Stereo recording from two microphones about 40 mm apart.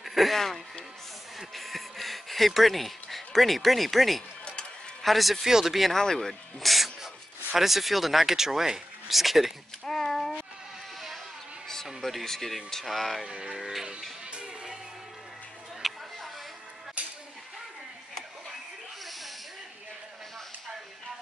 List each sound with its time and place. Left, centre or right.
0.0 s speech: centre
1.5 s a sound: centre
5.0 s speech: centre
9.8 s a sound: centre
11.6 s speech: centre
13.3 s music: right
13.6 s speech: centre
14.3 s music: right
15.8 s a sound: centre